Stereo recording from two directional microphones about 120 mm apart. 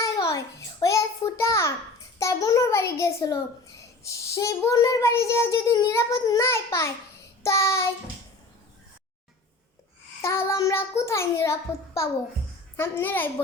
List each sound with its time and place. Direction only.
0.0 s a sound: 25° left (ahead or behind)
4.4 s child singing: 25° left (ahead or behind)
10.2 s child singing: 20° left (ahead or behind)
12.7 s a child's voice: 20° left (ahead or behind)